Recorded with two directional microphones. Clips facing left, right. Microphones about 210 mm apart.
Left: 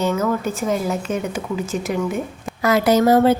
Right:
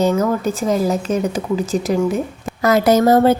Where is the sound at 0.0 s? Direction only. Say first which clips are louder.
Right 4 dB; 40° right (ahead or behind).